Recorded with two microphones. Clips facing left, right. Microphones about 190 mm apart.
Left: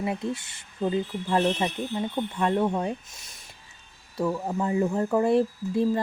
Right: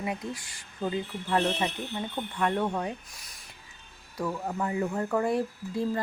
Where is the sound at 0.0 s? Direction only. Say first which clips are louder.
Left 5 dB; 25° left (ahead or behind).